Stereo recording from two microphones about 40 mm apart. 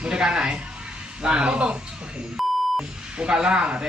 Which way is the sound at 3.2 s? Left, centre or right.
Right.